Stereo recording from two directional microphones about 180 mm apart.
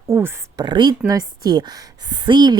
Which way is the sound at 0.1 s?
15° right (ahead or behind).